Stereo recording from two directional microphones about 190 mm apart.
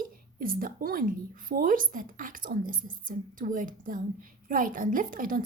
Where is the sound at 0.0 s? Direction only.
50° right (ahead or behind).